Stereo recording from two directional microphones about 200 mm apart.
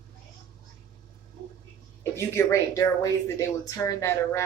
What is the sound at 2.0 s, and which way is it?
Speech, 15° left (ahead or behind).